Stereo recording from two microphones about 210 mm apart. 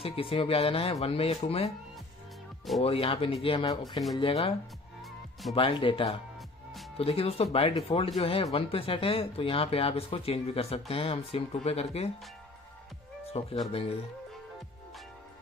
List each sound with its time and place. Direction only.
0.0 s speech: 25° left (ahead or behind)
2.8 s speech: 25° left (ahead or behind)
13.2 s speech: 30° left (ahead or behind)